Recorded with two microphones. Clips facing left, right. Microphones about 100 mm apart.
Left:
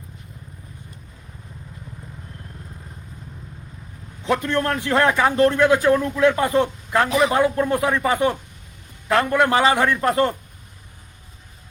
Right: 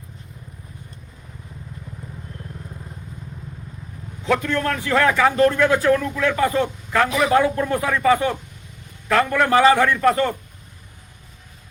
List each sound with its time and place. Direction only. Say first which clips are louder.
4.3 s a man's voice: even; 20° left (ahead or behind)